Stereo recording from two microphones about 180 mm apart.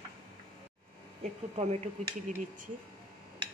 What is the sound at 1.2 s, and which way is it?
Speech, 40° right (ahead or behind).